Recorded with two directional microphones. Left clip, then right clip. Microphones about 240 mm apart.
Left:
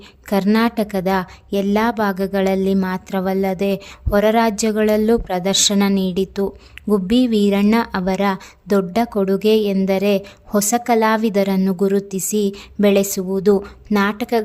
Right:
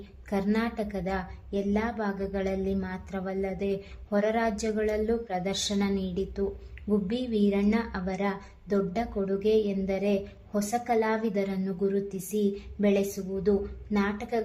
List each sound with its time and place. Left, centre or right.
0.3 s a woman's voice: left